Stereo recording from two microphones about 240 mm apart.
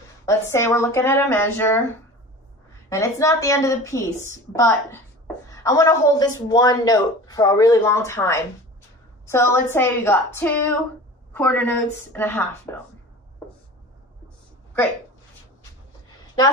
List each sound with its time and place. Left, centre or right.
0.2 s a man's voice: centre
2.9 s a man's voice: centre